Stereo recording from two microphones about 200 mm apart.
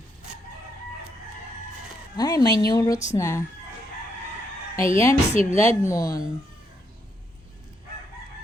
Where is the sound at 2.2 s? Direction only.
20° left (ahead or behind).